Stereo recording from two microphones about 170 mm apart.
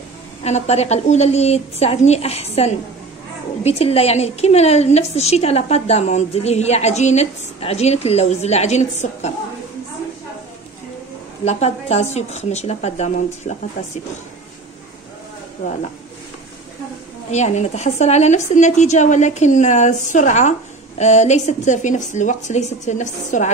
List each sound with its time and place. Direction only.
0.4 s a woman's voice: 40° left (ahead or behind)
11.4 s a woman's voice: 40° left (ahead or behind)
17.3 s a woman's voice: 40° left (ahead or behind)